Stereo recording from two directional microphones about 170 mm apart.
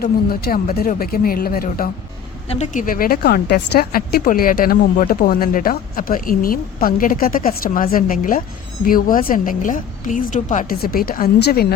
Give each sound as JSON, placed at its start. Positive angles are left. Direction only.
{"t": 0.0, "sound": "a woman's voice", "side_deg": 60}
{"t": 2.5, "sound": "a woman's voice", "side_deg": 45}